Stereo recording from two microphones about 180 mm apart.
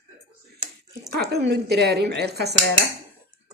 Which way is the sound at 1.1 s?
65° right (ahead or behind).